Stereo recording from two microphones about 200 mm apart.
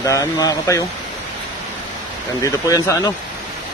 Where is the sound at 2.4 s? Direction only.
15° left (ahead or behind).